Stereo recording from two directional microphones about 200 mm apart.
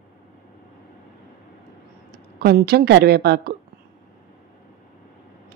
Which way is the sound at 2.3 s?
50° right (ahead or behind).